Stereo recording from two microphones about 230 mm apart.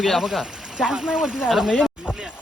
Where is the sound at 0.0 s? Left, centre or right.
Centre.